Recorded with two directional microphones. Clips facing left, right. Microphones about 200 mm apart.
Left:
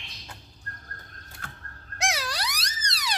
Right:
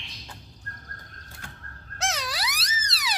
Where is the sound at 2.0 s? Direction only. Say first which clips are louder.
Left 1 dB; 10° left (ahead or behind).